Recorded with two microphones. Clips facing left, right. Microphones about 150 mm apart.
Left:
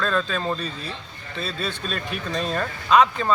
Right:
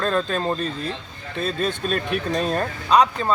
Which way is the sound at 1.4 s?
50° right (ahead or behind).